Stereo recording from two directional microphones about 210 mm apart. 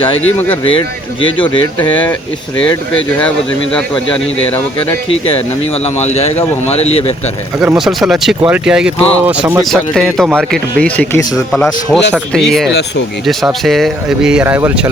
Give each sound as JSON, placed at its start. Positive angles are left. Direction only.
{"t": 0.3, "sound": "speech", "side_deg": 10}
{"t": 0.6, "sound": "speech", "side_deg": 25}
{"t": 1.8, "sound": "speech", "side_deg": 10}
{"t": 3.2, "sound": "speech", "side_deg": 5}
{"t": 5.8, "sound": "speech", "side_deg": 30}
{"t": 7.6, "sound": "speech", "side_deg": -5}